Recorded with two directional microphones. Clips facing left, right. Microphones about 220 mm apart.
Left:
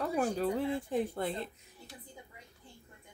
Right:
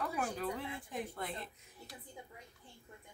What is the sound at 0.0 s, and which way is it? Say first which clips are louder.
Speech: left 7 dB; 30° left (ahead or behind).